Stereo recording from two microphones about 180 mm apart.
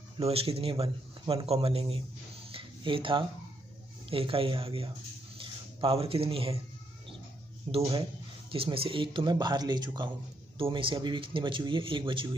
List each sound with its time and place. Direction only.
0.2 s speech: 35° right (ahead or behind)
2.5 s a sound: 30° right (ahead or behind)
4.1 s speech: 30° right (ahead or behind)
7.7 s speech: 30° right (ahead or behind)